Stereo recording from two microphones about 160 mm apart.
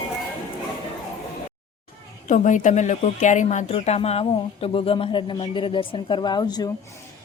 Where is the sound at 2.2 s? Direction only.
50° left (ahead or behind); by 6.7 s 25° left (ahead or behind).